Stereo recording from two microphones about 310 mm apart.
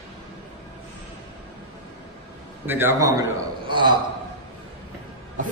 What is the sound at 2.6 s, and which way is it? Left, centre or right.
A man's voice, centre.